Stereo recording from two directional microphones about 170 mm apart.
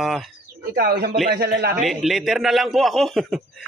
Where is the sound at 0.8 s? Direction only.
65° right (ahead or behind).